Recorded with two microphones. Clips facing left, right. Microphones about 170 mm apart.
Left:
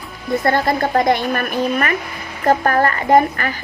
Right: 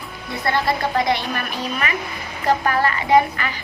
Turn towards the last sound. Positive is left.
turn(degrees=45)  # may be behind; listen again after turning